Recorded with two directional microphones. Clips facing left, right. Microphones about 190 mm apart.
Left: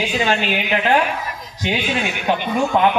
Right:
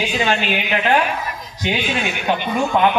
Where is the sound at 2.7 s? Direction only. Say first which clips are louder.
Even; 30° left (ahead or behind).